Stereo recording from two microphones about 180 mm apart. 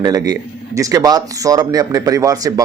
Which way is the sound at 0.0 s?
20° right (ahead or behind).